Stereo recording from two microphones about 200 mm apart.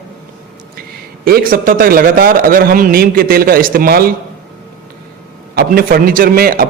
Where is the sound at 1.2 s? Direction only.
45° right (ahead or behind).